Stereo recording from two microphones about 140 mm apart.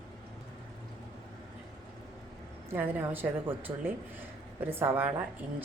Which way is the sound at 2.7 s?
15° right (ahead or behind).